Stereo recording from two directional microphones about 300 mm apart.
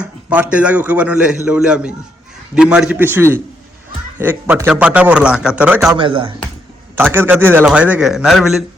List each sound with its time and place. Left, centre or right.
0.5 s a man's voice: centre
6.0 s speech: centre
6.9 s a man's voice: centre